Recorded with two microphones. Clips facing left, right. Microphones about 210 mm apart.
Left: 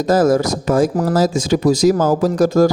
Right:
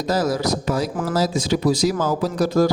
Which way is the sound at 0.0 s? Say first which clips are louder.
Left 7 dB; 50° left (ahead or behind).